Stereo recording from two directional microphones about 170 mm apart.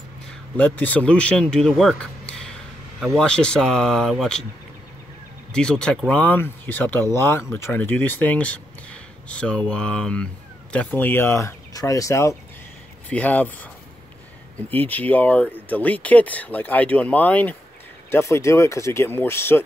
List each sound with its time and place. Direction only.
0.6 s speech: 10° left (ahead or behind)
5.5 s speech: 5° left (ahead or behind)
14.7 s speech: 10° left (ahead or behind)